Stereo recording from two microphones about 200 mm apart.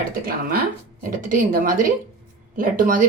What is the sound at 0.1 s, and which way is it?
A woman's voice, 45° right (ahead or behind).